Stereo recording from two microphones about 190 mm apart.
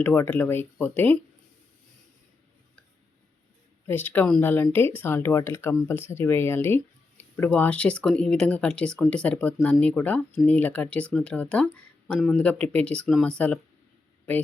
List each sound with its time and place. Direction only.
0.0 s speech: 10° left (ahead or behind)
3.8 s speech: 10° left (ahead or behind)